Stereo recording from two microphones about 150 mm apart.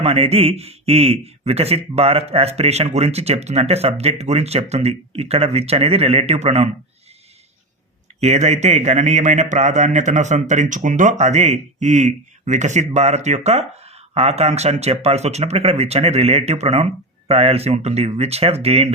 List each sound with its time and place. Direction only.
0.0 s a man's voice: 40° right (ahead or behind)
8.2 s a man's voice: 45° right (ahead or behind)